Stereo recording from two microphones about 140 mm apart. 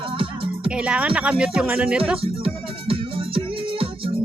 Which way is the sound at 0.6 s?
10° right (ahead or behind).